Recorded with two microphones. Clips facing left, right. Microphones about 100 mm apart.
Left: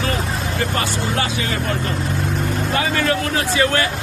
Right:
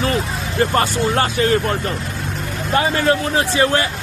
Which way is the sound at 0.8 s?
40° right (ahead or behind).